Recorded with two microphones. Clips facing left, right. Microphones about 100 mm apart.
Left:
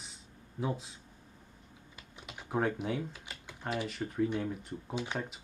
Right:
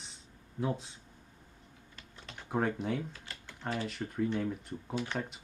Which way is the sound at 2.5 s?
Centre (ahead or behind).